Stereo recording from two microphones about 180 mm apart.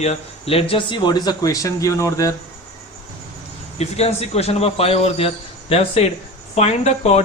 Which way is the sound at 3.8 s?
35° left (ahead or behind).